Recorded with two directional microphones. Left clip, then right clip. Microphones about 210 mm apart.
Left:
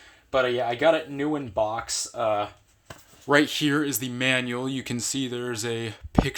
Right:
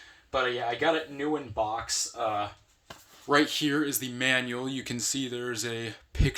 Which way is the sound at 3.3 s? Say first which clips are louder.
Left 3 dB; 35° left (ahead or behind).